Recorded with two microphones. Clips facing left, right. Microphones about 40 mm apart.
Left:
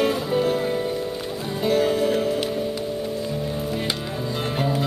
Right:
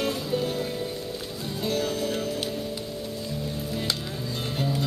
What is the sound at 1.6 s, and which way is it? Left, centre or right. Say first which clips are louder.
Music: left 8 dB; centre.